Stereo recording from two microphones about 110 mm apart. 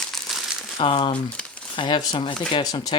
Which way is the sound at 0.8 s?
50° left (ahead or behind).